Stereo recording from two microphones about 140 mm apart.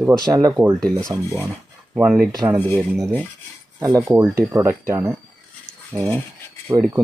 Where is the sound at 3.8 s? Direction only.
25° right (ahead or behind).